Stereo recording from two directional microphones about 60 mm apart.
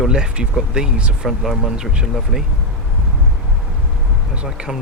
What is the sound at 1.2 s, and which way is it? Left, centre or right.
Speech, centre.